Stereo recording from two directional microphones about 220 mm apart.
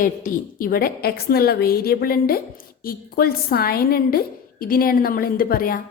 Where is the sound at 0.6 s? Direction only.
40° left (ahead or behind).